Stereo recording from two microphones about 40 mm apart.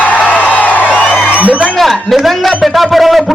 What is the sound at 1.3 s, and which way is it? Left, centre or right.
Speech, right.